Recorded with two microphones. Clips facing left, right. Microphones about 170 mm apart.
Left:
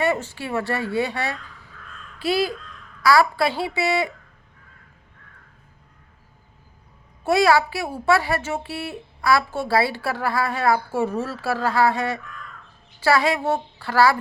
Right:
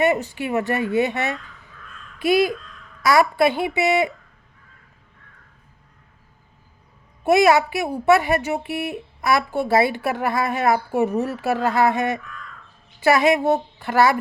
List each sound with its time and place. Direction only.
0.0 s a woman's voice: 15° right (ahead or behind)
7.3 s a child's voice: 20° right (ahead or behind)